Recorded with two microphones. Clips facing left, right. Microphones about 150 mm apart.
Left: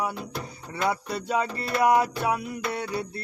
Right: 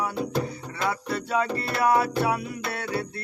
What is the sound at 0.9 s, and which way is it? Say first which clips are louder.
Music: right 2 dB; 20° left (ahead or behind).